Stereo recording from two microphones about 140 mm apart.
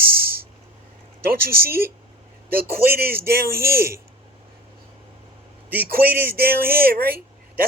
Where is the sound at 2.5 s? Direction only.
90° right.